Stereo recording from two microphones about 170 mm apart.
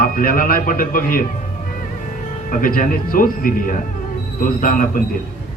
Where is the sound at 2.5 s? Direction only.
55° left (ahead or behind).